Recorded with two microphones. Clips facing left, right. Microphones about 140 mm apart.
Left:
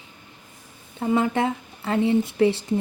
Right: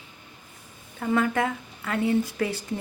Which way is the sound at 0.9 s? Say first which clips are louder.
Left 2 dB; 25° left (ahead or behind).